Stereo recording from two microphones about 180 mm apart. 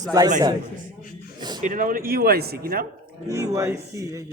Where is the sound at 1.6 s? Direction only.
50° right (ahead or behind).